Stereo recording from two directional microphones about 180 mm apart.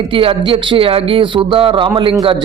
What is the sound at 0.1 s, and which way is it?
Speech, 30° right (ahead or behind).